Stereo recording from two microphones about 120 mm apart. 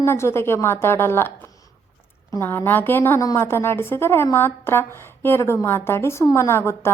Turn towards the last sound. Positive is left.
turn(degrees=20)  # may be behind; listen again after turning